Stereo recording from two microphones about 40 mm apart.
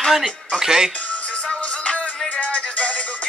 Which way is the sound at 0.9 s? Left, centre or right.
Left.